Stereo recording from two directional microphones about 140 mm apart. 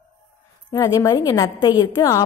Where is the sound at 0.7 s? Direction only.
25° left (ahead or behind).